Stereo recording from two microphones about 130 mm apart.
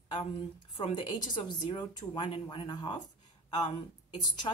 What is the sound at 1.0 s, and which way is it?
Speech, 35° left (ahead or behind).